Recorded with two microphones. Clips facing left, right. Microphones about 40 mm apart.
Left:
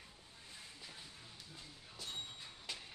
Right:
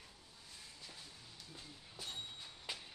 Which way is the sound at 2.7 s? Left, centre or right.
Centre.